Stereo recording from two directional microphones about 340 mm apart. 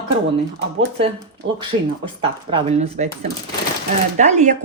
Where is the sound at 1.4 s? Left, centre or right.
Right.